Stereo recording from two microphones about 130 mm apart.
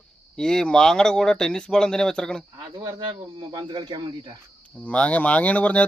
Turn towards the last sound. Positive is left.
turn(degrees=10)  # may be behind; listen again after turning